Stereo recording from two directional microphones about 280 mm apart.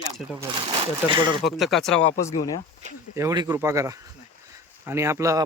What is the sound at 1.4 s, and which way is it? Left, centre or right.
Speech, centre.